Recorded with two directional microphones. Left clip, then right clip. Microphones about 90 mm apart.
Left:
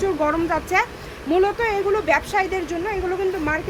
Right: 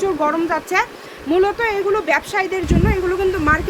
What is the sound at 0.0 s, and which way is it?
Speech, 15° right (ahead or behind).